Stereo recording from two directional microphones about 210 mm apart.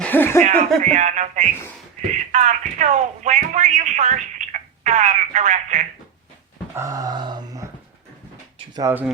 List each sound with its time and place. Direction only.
0.0 s music: 10° left (ahead or behind)
0.8 s speech: 35° right (ahead or behind)
6.7 s a sound: 15° right (ahead or behind)
8.7 s speech: 15° right (ahead or behind)